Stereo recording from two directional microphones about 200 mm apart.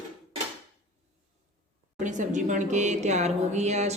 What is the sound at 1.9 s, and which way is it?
A woman's voice, 40° right (ahead or behind).